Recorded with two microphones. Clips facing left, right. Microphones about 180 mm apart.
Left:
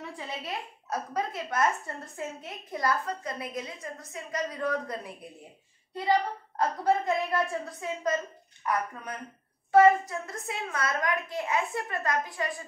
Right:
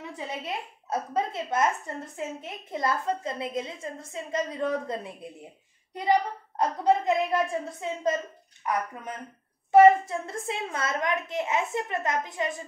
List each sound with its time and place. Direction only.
0.1 s a woman's voice: 20° right (ahead or behind)
9.7 s a woman's voice: 25° right (ahead or behind)